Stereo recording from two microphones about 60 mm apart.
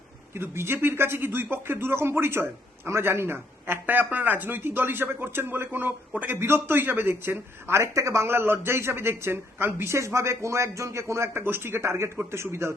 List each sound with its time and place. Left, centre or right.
0.3 s speech: right
6.3 s speech: right
7.7 s speech: right
11.4 s speech: right